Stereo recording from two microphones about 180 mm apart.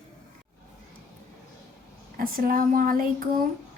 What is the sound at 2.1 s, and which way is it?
Speech, 50° right (ahead or behind).